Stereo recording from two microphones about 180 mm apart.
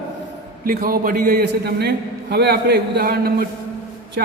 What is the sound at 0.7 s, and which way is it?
A man's voice, 55° right (ahead or behind).